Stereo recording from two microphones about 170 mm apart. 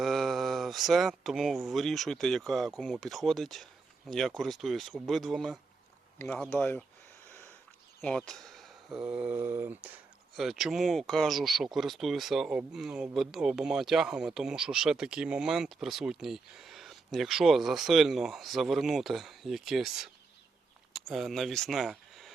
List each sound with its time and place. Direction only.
0.0 s speech: centre (ahead or behind)
8.0 s speech: 5° left (ahead or behind); by 9.9 s 10° right (ahead or behind)
10.3 s speech: centre (ahead or behind)
21.1 s speech: centre (ahead or behind)